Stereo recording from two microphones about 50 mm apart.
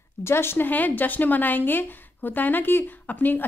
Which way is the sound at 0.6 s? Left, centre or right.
Left.